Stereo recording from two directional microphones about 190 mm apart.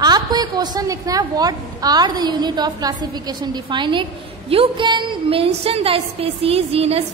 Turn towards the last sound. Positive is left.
turn(degrees=-30)  # may be behind; listen again after turning